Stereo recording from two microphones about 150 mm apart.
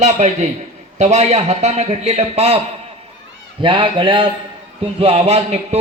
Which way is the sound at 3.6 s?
35° right (ahead or behind).